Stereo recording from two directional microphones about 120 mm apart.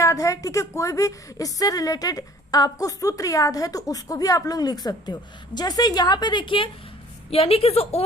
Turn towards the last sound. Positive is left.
turn(degrees=55)  # may be behind; listen again after turning